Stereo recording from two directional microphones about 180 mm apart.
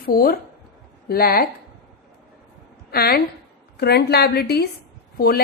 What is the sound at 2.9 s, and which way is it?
A woman's voice, 60° left (ahead or behind).